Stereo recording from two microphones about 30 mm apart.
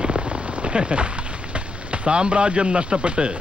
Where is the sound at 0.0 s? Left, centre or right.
Right.